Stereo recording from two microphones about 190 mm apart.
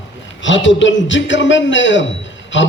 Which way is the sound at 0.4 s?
75° left (ahead or behind).